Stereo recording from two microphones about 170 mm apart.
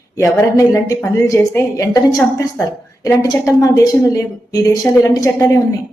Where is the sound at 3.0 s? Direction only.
20° left (ahead or behind).